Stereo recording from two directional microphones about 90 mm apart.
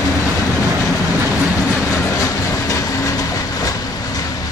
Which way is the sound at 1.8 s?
35° left (ahead or behind).